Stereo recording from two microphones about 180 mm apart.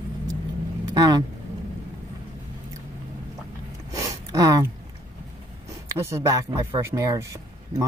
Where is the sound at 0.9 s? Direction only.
20° right (ahead or behind).